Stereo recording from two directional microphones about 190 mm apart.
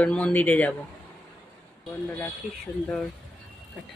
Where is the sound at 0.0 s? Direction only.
5° left (ahead or behind).